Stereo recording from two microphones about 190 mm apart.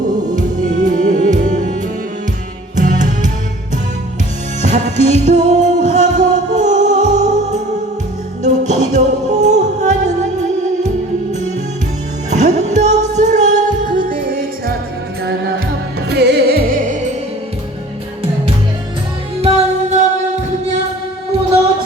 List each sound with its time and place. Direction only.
0.3 s music: 40° right (ahead or behind)
2.7 s music: 40° right (ahead or behind)
4.6 s music: 40° right (ahead or behind)
12.3 s music: 35° right (ahead or behind)
15.2 s music: 60° right (ahead or behind); by 17.1 s 45° right (ahead or behind)
19.4 s music: 30° right (ahead or behind)